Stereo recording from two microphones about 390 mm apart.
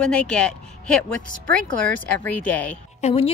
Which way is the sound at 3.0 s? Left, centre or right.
Centre.